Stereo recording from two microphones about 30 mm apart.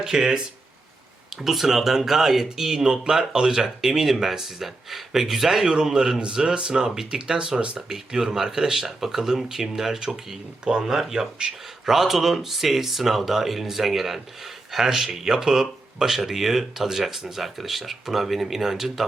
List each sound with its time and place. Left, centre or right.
0.0 s speech: right
1.4 s speech: centre
2.8 s speech: right; by 5.6 s centre
5.6 s speech: right
6.7 s speech: centre
16.0 s speech: centre